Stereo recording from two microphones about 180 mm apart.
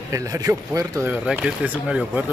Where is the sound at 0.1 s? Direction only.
20° right (ahead or behind).